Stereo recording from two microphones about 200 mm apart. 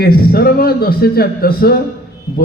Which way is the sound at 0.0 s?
50° left (ahead or behind).